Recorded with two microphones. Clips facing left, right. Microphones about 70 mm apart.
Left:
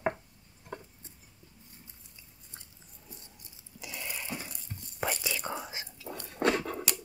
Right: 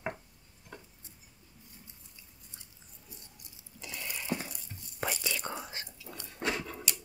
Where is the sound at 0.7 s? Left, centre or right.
Left.